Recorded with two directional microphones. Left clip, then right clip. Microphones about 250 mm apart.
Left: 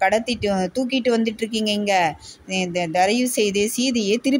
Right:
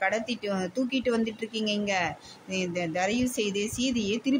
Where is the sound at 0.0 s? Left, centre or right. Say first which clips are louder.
Left 9 dB; centre.